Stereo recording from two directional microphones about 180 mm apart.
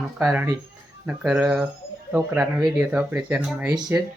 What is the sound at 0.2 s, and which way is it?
Speech, 10° right (ahead or behind).